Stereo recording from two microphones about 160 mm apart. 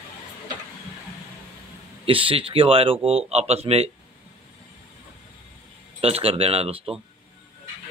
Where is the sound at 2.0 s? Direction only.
35° right (ahead or behind).